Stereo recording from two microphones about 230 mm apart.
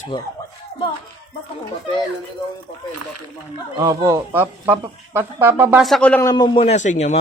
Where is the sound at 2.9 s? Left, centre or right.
Right.